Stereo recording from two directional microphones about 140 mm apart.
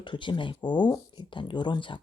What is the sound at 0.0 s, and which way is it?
Speech, 35° left (ahead or behind).